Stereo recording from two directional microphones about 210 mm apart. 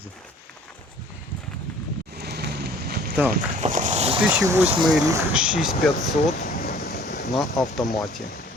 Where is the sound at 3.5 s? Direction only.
35° right (ahead or behind).